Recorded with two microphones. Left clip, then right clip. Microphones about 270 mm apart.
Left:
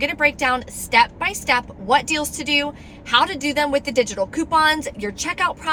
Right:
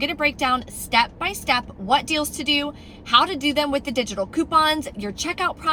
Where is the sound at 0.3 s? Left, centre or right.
Centre.